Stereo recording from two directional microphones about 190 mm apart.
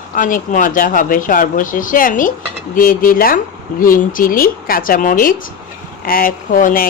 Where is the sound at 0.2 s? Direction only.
45° left (ahead or behind).